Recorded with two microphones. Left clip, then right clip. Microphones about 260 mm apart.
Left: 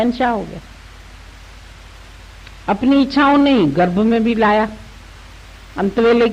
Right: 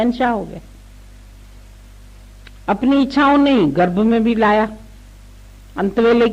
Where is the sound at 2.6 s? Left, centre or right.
Left.